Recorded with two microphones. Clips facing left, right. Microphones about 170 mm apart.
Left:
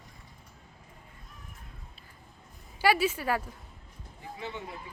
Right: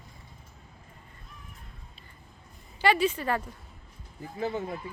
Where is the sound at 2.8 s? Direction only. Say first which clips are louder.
Right 1 dB; 5° left (ahead or behind).